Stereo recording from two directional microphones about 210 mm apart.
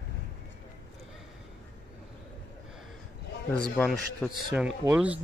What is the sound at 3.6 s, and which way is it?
Speech, 5° left (ahead or behind).